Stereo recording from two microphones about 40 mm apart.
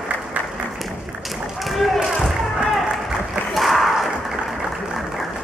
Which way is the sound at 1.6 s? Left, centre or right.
Centre.